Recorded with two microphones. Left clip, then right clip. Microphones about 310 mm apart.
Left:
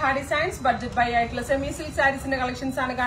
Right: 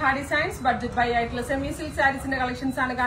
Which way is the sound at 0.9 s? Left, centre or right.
Centre.